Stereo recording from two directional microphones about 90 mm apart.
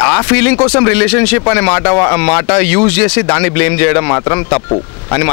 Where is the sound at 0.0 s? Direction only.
20° left (ahead or behind).